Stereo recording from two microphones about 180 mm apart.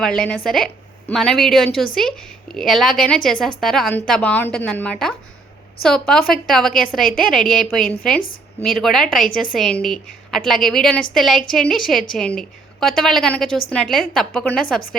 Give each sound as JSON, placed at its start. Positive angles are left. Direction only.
{"t": 0.0, "sound": "a woman's voice", "side_deg": 5}